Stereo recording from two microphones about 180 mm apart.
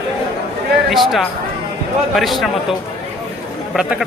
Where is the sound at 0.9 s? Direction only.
Centre (ahead or behind).